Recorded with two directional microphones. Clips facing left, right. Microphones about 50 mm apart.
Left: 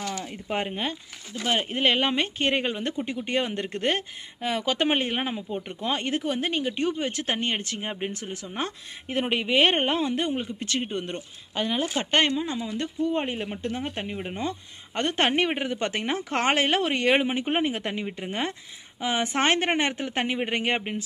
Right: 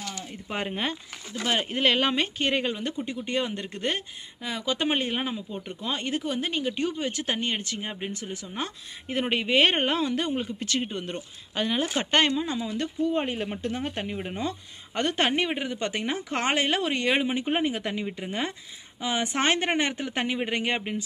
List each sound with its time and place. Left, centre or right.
0.0 s a sound: left
0.7 s speech: centre
1.4 s speech: centre
2.5 s a woman's voice: left
4.8 s a woman's voice: left
7.8 s speech: left
8.5 s speech: left
9.2 s speech: centre
9.8 s speech: left
10.3 s speech: centre
11.5 s speech: centre
15.0 s a woman's voice: left
19.3 s a woman's voice: left